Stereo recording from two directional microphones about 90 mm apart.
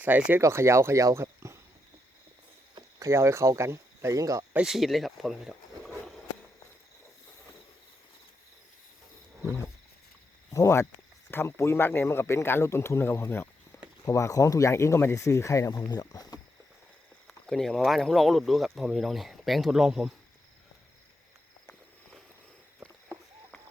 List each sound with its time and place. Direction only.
0.0 s speech: 15° right (ahead or behind)
0.4 s speech: 30° right (ahead or behind)
3.0 s speech: 30° right (ahead or behind)
4.6 s speech: centre (ahead or behind)
10.5 s speech: 35° left (ahead or behind)
15.9 s speech: 45° left (ahead or behind)
17.2 s speech: 5° left (ahead or behind)